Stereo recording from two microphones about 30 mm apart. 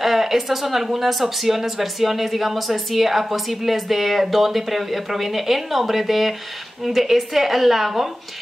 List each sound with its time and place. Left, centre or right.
0.0 s speech: centre